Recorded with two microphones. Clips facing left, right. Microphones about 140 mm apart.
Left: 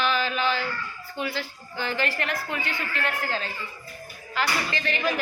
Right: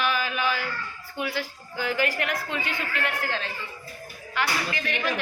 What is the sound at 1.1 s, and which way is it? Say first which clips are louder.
A woman's voice: right 1 dB; 5° right (ahead or behind).